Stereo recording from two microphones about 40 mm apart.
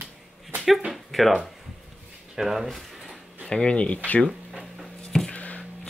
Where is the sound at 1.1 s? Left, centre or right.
Centre.